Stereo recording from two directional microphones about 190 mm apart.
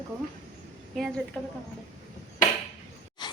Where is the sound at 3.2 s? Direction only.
25° left (ahead or behind).